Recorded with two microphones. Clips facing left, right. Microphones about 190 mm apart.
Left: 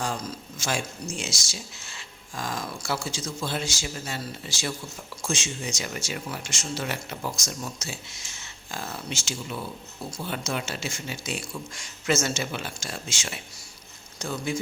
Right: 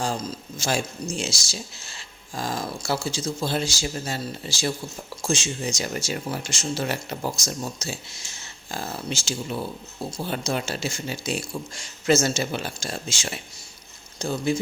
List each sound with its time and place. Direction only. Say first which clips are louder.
0.0 s speech: right 3 dB; 30° right (ahead or behind)